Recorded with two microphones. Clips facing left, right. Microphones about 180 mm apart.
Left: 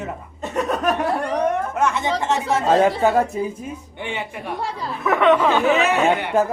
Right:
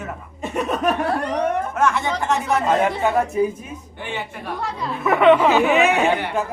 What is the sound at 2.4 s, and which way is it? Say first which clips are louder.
Speech: left 3 dB; 35° left (ahead or behind).